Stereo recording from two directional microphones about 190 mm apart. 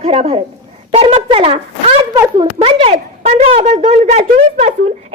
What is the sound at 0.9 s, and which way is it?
Speech, 30° right (ahead or behind).